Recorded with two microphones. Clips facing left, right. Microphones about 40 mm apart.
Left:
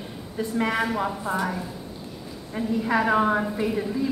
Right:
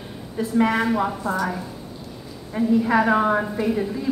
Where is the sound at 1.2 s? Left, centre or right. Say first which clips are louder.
Right 2 dB; left.